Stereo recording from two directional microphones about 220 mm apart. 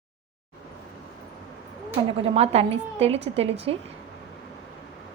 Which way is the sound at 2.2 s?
25° right (ahead or behind).